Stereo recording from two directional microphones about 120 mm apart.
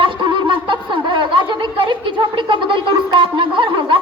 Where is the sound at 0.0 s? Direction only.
40° right (ahead or behind).